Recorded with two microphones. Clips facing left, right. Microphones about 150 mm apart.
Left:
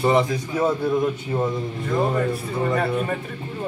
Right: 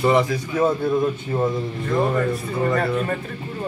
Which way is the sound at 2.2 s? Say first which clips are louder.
Right 1 dB; 10° left (ahead or behind).